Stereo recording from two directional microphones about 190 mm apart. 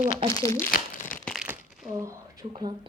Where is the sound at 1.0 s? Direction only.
5° left (ahead or behind).